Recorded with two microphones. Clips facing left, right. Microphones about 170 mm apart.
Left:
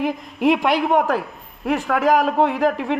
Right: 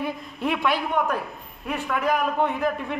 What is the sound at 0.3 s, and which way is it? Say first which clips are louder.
A man's voice: left 7 dB; 85° left.